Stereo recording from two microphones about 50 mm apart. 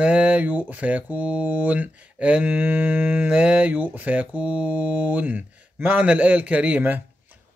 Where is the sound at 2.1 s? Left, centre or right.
Right.